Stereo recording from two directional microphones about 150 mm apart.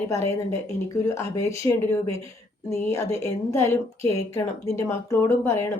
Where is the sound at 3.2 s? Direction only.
20° left (ahead or behind).